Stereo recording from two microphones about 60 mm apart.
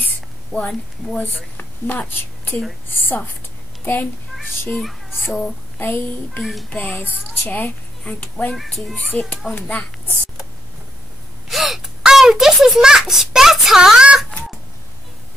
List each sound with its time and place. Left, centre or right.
2.0 s a woman's voice: left
3.8 s a child's voice: left
4.7 s child singing: centre
5.8 s a child's voice: left
7.4 s speech: left
8.5 s a child's voice: centre
8.9 s speech: left
9.2 s a child's voice: centre
9.5 s speech: left
11.4 s gasp: centre